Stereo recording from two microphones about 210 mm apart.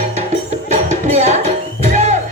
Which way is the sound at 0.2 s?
35° right (ahead or behind).